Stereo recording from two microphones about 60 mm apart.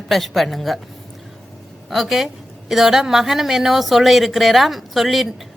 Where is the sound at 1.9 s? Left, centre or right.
Centre.